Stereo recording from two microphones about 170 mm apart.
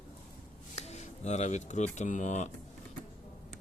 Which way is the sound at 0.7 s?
40° left (ahead or behind).